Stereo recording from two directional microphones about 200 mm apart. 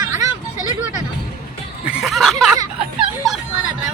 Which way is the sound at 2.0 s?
Centre (ahead or behind).